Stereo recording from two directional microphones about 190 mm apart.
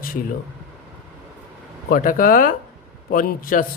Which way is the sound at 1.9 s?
45° left (ahead or behind).